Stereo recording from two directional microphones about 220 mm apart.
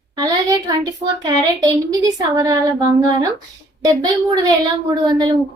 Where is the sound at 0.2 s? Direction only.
15° right (ahead or behind).